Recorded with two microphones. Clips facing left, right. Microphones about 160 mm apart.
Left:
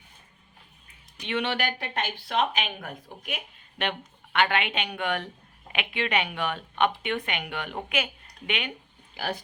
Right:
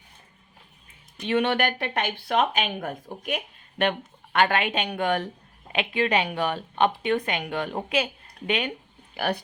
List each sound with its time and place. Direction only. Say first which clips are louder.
1.3 s speech: right 5 dB; 50° right (ahead or behind)
9.1 s speech: right 5 dB; 60° right (ahead or behind)